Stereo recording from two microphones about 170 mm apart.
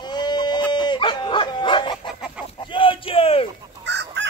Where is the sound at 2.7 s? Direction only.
30° left (ahead or behind).